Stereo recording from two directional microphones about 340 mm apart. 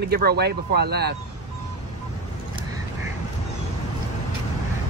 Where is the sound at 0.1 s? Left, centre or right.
Right.